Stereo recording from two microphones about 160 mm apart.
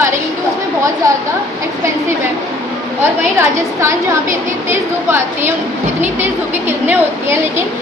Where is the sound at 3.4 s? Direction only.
15° right (ahead or behind).